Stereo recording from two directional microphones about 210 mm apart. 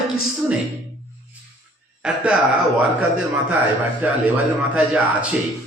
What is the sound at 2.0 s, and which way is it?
A man's voice, 5° right (ahead or behind).